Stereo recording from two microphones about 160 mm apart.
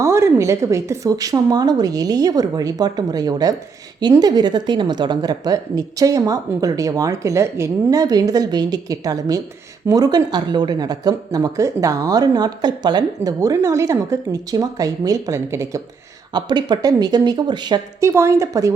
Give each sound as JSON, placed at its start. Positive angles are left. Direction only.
{"t": 0.0, "sound": "speech", "side_deg": -20}